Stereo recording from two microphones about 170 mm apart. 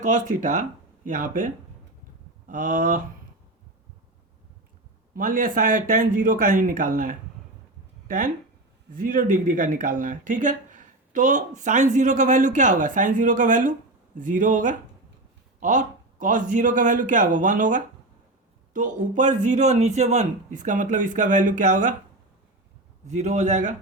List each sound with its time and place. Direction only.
0.0 s speech: 45° right (ahead or behind)
5.1 s speech: 55° right (ahead or behind)
23.0 s speech: 45° right (ahead or behind)